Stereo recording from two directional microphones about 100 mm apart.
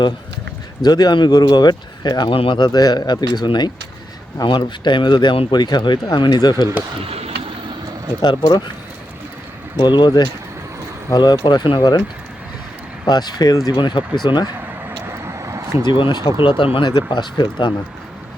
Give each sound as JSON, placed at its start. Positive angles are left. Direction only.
{"t": 0.8, "sound": "speech", "side_deg": 45}
{"t": 2.3, "sound": "speech", "side_deg": 60}
{"t": 7.1, "sound": "vehicle", "side_deg": -90}
{"t": 8.2, "sound": "speech", "side_deg": 50}
{"t": 9.7, "sound": "speech", "side_deg": 50}
{"t": 13.1, "sound": "speech", "side_deg": 45}
{"t": 14.8, "sound": "vehicle", "side_deg": -30}
{"t": 15.9, "sound": "speech", "side_deg": 50}